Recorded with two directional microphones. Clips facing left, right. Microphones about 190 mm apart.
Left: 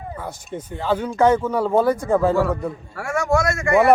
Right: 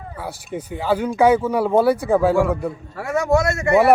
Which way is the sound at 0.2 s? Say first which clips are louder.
Right 2 dB; 10° right (ahead or behind).